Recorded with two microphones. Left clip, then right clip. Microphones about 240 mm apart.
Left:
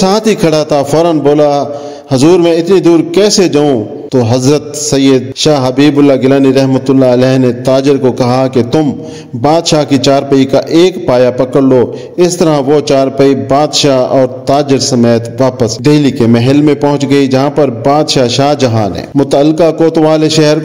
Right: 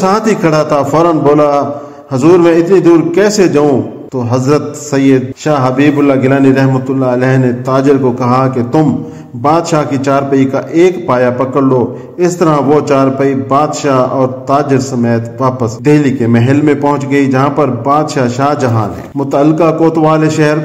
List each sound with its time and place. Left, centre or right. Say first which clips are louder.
0.0 s a man's voice: left 1 dB; left